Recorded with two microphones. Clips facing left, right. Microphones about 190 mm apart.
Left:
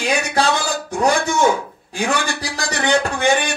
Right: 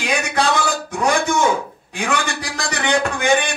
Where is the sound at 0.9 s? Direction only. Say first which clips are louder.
Left 2 dB; 35° left (ahead or behind).